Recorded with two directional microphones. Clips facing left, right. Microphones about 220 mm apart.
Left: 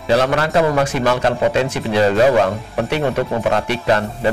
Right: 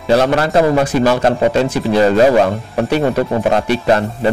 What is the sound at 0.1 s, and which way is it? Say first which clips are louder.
A man's voice: right 3 dB; 40° right (ahead or behind).